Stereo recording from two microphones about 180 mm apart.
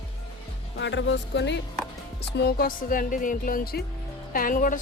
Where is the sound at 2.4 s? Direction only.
60° left (ahead or behind).